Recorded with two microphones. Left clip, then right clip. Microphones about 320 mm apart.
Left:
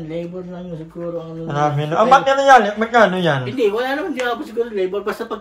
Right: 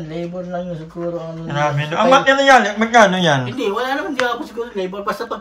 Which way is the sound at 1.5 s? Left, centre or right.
Centre.